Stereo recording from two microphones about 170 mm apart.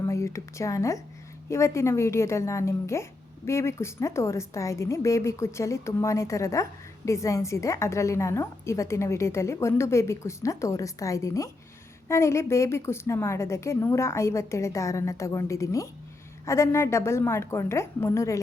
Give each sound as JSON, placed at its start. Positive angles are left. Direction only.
{"t": 0.1, "sound": "a woman's voice", "side_deg": 15}